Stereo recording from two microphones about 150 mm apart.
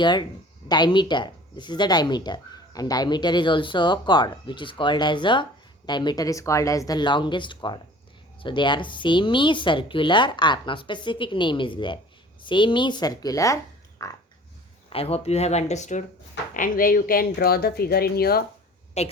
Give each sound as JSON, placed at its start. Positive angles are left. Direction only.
{"t": 0.0, "sound": "speech", "side_deg": 30}
{"t": 14.8, "sound": "speech", "side_deg": 40}
{"t": 16.6, "sound": "speech", "side_deg": 70}
{"t": 19.0, "sound": "speech", "side_deg": 45}